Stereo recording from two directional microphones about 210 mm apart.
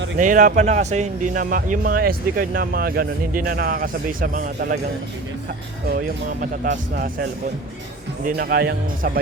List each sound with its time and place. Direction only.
0.2 s speech: 40° right (ahead or behind)
5.9 s speech: 40° right (ahead or behind)